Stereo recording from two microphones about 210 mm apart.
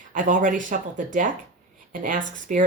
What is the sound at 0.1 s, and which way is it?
Speech, 40° right (ahead or behind).